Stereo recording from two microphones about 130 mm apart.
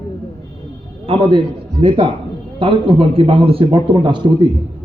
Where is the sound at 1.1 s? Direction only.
40° right (ahead or behind).